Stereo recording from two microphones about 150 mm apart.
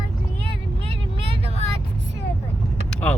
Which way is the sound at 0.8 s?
35° right (ahead or behind).